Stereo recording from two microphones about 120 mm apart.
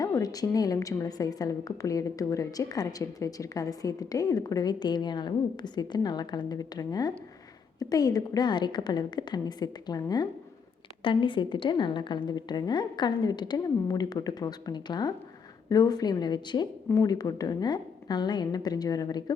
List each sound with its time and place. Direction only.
0.0 s a woman's voice: 30° left (ahead or behind)